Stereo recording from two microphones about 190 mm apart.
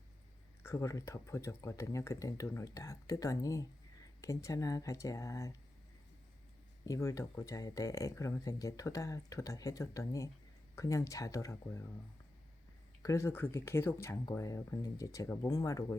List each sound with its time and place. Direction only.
0.6 s speech: 15° left (ahead or behind)
6.8 s speech: 15° left (ahead or behind)
13.0 s speech: 15° left (ahead or behind)